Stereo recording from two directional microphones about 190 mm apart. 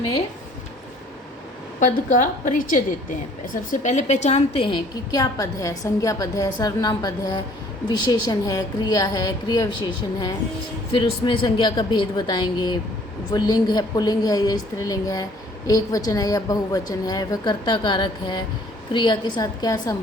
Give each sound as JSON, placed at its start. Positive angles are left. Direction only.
{"t": 1.8, "sound": "a woman's voice", "side_deg": 40}